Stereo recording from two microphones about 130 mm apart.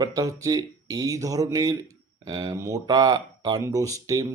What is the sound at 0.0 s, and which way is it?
Speech, 30° right (ahead or behind).